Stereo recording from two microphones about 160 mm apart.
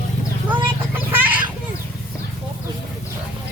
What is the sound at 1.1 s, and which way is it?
Children playing, 10° right (ahead or behind).